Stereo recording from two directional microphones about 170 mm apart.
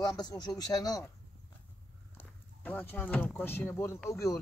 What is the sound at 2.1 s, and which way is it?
Speech, 10° left (ahead or behind).